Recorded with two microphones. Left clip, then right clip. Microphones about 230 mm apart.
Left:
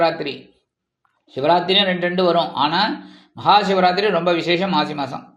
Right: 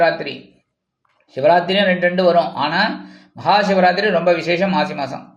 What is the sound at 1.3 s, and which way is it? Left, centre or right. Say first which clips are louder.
A man's voice: right 2 dB; centre.